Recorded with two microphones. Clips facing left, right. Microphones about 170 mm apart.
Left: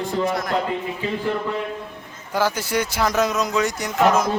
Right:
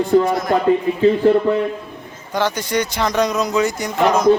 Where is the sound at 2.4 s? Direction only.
5° left (ahead or behind).